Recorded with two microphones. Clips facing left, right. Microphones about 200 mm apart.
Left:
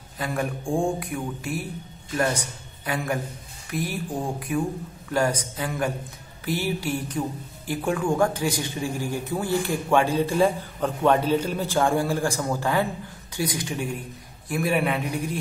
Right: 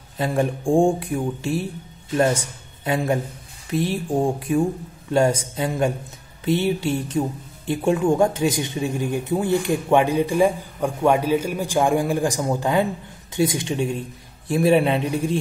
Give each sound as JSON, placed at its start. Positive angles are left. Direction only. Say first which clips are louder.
{"t": 0.2, "sound": "speech", "louder": "right 6 dB", "side_deg": -25}